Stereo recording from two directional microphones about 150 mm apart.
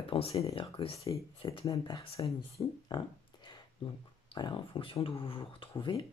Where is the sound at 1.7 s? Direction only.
20° left (ahead or behind).